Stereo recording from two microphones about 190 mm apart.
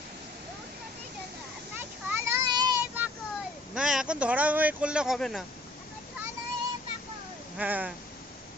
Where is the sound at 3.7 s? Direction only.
5° right (ahead or behind).